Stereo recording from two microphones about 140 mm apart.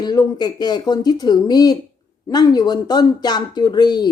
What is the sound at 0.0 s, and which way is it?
Speech, 30° left (ahead or behind).